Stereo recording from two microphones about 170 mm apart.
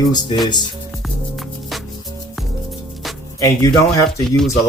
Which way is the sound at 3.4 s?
20° left (ahead or behind).